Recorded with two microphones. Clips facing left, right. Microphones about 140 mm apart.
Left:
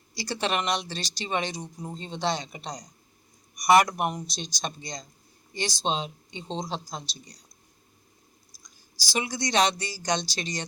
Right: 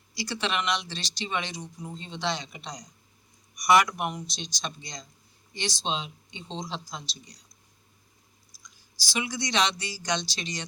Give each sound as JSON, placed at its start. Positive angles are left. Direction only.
{"t": 0.1, "sound": "speech", "side_deg": 45}
{"t": 8.6, "sound": "speech", "side_deg": 40}